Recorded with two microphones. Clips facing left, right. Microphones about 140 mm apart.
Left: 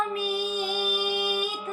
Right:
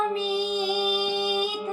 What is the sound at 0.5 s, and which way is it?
Music, 25° right (ahead or behind).